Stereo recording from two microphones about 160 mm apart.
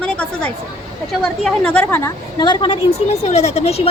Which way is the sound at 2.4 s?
30° left (ahead or behind).